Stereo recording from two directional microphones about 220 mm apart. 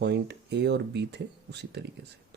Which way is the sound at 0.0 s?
50° right (ahead or behind).